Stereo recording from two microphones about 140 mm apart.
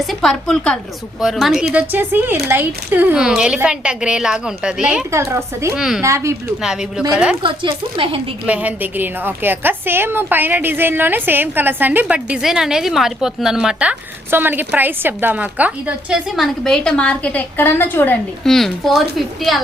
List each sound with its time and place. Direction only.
0.0 s a woman's voice: centre (ahead or behind)
1.8 s a woman's voice: 15° right (ahead or behind)
5.1 s a woman's voice: 20° right (ahead or behind)
5.7 s a woman's voice: 5° right (ahead or behind)
6.0 s a woman's voice: 20° right (ahead or behind)
6.6 s a woman's voice: 5° right (ahead or behind)
7.4 s speech: 35° right (ahead or behind)
8.4 s a woman's voice: 10° right (ahead or behind); by 18.2 s 15° left (ahead or behind)
18.4 s a woman's voice: centre (ahead or behind)